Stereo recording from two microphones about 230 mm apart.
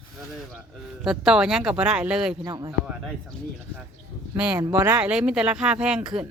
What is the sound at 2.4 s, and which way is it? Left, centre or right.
Speech, centre.